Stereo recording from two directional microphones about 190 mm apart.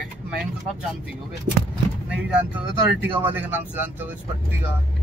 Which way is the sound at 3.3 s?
10° right (ahead or behind).